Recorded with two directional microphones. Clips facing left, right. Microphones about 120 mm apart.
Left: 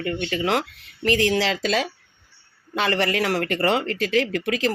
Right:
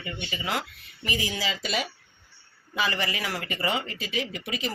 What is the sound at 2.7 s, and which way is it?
Speech, 65° left (ahead or behind).